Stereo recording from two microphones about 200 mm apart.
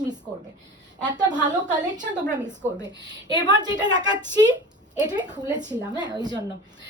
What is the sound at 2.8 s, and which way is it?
Speech, 60° right (ahead or behind).